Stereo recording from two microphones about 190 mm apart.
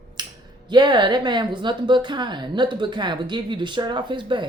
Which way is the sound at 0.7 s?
25° right (ahead or behind).